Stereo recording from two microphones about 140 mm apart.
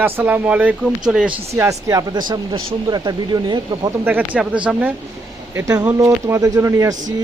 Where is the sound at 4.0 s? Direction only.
10° right (ahead or behind).